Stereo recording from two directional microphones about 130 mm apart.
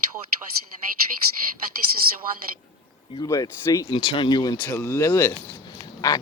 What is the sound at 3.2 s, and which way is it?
Speech, 30° left (ahead or behind).